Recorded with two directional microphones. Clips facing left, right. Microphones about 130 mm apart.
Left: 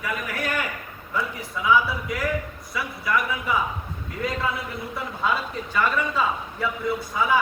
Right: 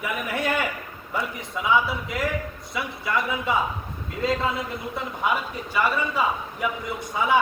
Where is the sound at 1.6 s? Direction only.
25° right (ahead or behind).